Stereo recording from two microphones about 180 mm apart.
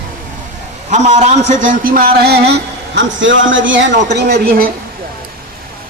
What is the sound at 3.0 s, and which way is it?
Speech, 90° right.